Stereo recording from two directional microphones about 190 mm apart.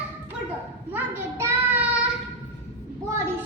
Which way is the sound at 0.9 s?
10° right (ahead or behind).